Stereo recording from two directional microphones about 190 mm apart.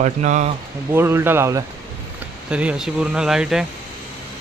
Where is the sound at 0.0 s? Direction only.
40° right (ahead or behind).